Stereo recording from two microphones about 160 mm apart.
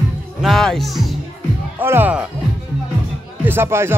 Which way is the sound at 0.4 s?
Centre (ahead or behind).